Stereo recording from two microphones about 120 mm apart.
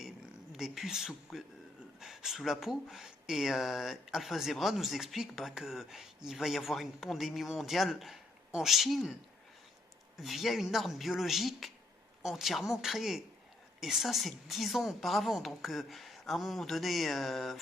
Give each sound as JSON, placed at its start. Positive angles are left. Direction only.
{"t": 0.5, "sound": "speech", "side_deg": 0}
{"t": 10.2, "sound": "speech", "side_deg": 0}